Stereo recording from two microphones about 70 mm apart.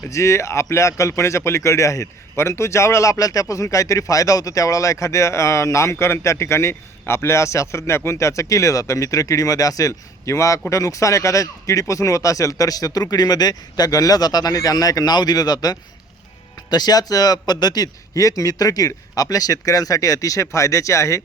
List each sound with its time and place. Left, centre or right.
0.1 s a man's voice: left
14.5 s speech: left
18.1 s speech: left